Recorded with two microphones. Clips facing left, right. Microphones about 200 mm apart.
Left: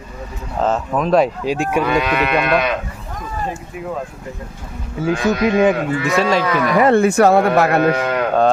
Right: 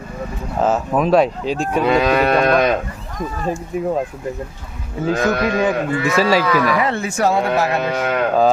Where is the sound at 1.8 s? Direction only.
30° right (ahead or behind).